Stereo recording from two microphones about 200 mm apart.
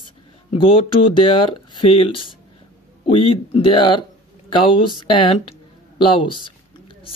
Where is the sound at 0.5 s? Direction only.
25° left (ahead or behind).